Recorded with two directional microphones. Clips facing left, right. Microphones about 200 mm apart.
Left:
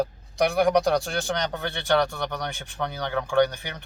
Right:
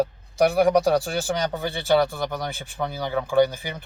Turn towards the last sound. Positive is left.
turn(degrees=-5)  # may be behind; listen again after turning